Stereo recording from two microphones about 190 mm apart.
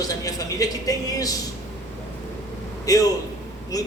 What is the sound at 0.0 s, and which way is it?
A man's voice, 20° left (ahead or behind).